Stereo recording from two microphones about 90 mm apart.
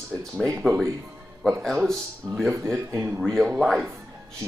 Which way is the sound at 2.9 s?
25° right (ahead or behind).